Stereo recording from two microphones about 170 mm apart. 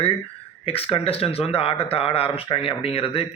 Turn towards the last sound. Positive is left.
turn(degrees=35)  # may be behind; listen again after turning